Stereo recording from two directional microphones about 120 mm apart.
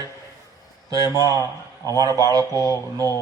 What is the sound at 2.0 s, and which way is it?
Speech, 30° right (ahead or behind).